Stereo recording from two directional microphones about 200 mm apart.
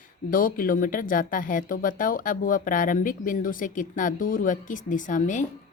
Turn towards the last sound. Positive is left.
turn(degrees=40)  # may be behind; listen again after turning